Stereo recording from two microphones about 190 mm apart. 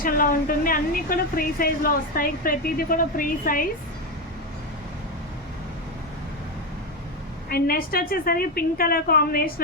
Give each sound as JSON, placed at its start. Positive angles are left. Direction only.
{"t": 0.0, "sound": "a woman's voice", "side_deg": 45}
{"t": 7.5, "sound": "a woman's voice", "side_deg": 50}